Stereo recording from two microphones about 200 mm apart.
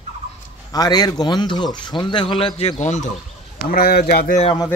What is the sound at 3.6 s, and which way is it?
Speech, 50° left (ahead or behind).